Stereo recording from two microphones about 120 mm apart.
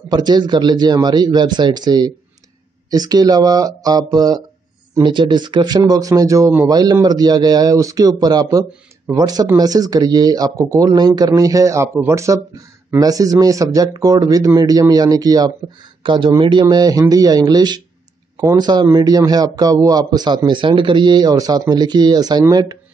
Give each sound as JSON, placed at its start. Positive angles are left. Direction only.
{"t": 0.1, "sound": "a man's voice", "side_deg": -35}
{"t": 16.6, "sound": "a man's voice", "side_deg": -30}